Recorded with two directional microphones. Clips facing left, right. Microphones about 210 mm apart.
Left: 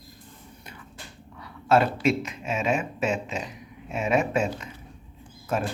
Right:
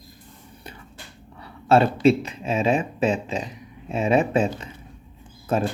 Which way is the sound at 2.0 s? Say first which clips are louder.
Right 6 dB; 30° right (ahead or behind).